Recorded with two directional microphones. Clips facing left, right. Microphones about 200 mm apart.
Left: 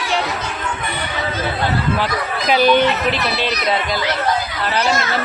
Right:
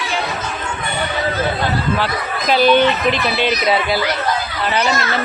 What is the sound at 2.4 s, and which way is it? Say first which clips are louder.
Speech: right 1 dB; 10° left (ahead or behind).